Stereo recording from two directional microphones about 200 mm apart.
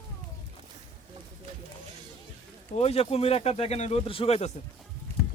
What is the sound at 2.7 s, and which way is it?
Speech, 30° left (ahead or behind).